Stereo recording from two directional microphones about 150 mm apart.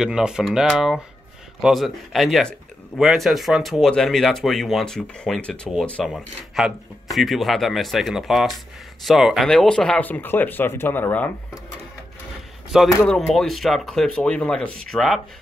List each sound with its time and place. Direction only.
0.0 s speech: 5° right (ahead or behind); by 11.3 s 15° left (ahead or behind)
13.0 s speech: 5° left (ahead or behind)